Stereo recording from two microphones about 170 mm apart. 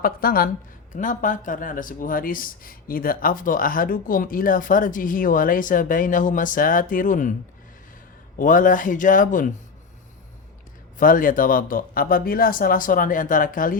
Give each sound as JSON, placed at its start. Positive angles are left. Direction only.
{"t": 0.0, "sound": "a woman's voice", "side_deg": 60}
{"t": 0.9, "sound": "speech", "side_deg": 50}
{"t": 8.4, "sound": "speech", "side_deg": 50}
{"t": 10.9, "sound": "speech", "side_deg": 55}